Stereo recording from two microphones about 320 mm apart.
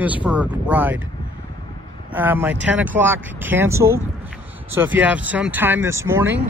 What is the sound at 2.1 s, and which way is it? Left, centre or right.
Speech, centre.